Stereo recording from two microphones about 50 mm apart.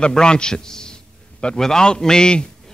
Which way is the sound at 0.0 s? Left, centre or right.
Centre.